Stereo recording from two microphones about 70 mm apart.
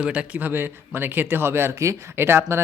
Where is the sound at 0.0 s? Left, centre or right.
Centre.